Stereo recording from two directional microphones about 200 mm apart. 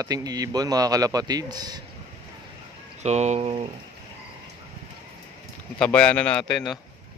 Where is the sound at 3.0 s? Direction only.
35° right (ahead or behind).